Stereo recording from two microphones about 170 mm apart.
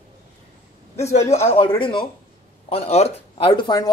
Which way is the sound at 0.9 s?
40° left (ahead or behind).